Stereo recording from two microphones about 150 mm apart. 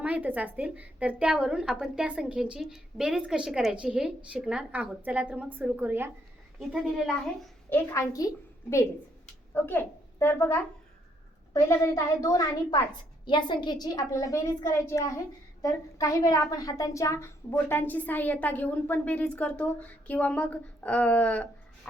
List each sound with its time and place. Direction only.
0.0 s a woman's voice: 10° right (ahead or behind)
6.6 s a woman's voice: centre (ahead or behind)
7.7 s a child's voice: 20° left (ahead or behind)
9.2 s a child's voice: 10° left (ahead or behind)